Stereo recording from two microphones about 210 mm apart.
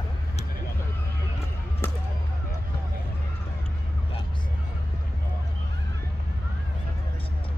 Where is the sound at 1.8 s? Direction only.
10° left (ahead or behind).